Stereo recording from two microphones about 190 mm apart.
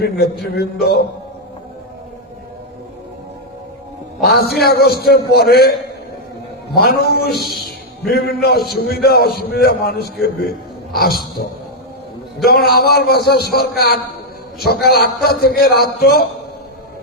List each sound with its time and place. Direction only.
0.0 s a man's voice: 55° left (ahead or behind)
4.5 s a man's voice: 55° left (ahead or behind)
6.7 s a man's voice: 55° left (ahead or behind)
10.9 s a sound: 55° left (ahead or behind)
12.4 s a man's voice: 55° left (ahead or behind)